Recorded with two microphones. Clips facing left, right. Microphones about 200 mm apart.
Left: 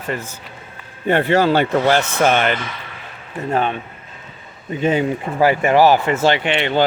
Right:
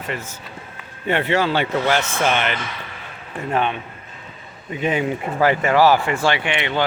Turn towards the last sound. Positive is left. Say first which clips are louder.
# left 5 dB
turn(degrees=35)  # may be behind; listen again after turning